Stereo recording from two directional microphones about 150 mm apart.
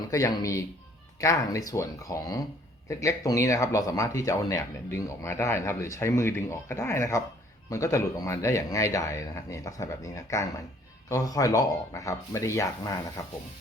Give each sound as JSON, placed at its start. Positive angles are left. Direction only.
{"t": 0.1, "sound": "speech", "side_deg": 20}